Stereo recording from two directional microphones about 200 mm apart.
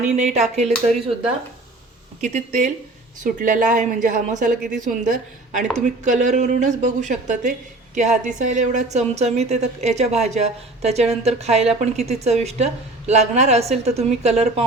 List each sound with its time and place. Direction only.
0.2 s a woman's voice: 35° right (ahead or behind)
2.2 s a woman's voice: 35° right (ahead or behind)